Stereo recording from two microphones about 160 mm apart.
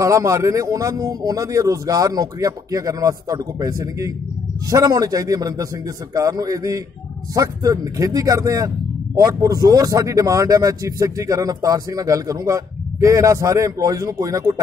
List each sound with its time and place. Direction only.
0.0 s speech: 20° right (ahead or behind)